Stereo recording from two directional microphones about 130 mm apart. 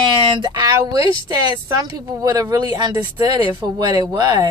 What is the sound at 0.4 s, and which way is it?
Speech, 30° right (ahead or behind).